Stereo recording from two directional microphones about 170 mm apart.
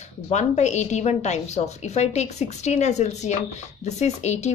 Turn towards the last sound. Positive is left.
turn(degrees=40)  # may be behind; listen again after turning